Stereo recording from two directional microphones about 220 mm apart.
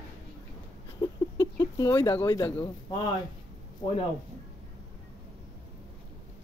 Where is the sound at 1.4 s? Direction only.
15° left (ahead or behind).